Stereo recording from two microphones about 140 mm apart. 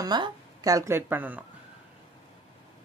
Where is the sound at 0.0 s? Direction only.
30° right (ahead or behind); by 1.4 s 10° right (ahead or behind).